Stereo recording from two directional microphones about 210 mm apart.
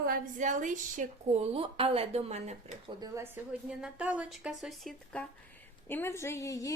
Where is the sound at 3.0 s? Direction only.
10° right (ahead or behind).